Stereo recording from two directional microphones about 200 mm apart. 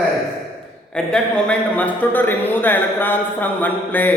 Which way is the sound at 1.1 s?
5° left (ahead or behind).